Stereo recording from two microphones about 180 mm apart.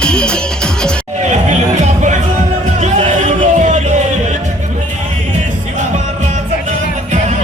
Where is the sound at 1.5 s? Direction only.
40° right (ahead or behind).